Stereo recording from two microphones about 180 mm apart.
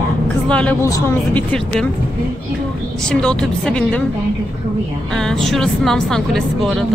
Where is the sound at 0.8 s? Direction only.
20° left (ahead or behind).